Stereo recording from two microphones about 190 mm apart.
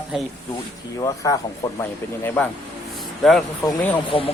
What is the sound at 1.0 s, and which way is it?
Speech, 15° left (ahead or behind).